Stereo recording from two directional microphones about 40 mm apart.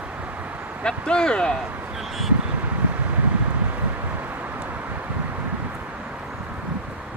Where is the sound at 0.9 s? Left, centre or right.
Left.